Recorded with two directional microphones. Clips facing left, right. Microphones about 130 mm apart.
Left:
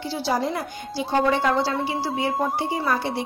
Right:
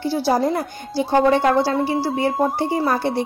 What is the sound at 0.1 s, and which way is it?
A woman's voice, 45° right (ahead or behind).